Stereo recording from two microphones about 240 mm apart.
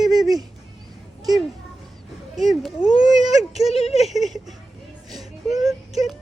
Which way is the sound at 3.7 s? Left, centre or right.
Left.